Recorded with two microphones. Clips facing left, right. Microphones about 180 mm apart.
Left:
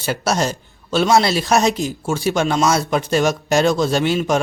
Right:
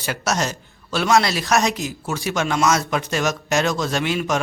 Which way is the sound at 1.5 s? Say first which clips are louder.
Left 3 dB; 35° left (ahead or behind).